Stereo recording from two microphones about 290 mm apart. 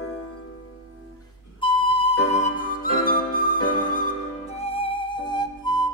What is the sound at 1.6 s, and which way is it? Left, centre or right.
Music, centre.